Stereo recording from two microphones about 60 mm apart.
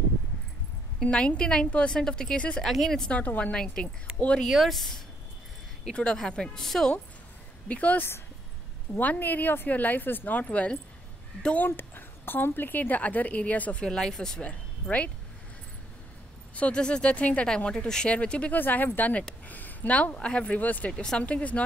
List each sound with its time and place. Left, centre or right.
1.0 s a woman's voice: centre
2.6 s speech: centre
3.1 s speech: left
3.5 s a woman's voice: centre
4.5 s a woman's voice: centre
7.6 s speech: left
11.5 s speech: left
13.8 s a woman's voice: centre
14.4 s speech: left
16.5 s speech: centre
17.6 s a woman's voice: centre
18.5 s speech: left
20.9 s a woman's voice: centre
21.2 s speech: left